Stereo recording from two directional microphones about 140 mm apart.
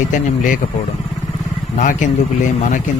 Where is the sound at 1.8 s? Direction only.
65° left (ahead or behind).